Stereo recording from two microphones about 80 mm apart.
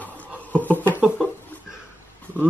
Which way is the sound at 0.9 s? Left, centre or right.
Centre.